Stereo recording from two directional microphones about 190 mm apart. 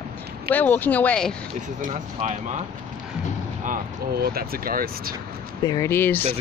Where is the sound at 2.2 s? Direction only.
40° right (ahead or behind).